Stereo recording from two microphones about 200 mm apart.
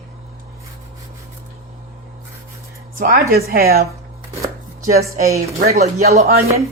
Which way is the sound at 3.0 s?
50° right (ahead or behind).